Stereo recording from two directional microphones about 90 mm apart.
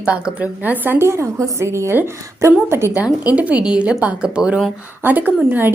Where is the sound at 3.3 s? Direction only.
15° right (ahead or behind).